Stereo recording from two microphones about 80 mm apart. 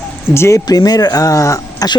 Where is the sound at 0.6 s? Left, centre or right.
Left.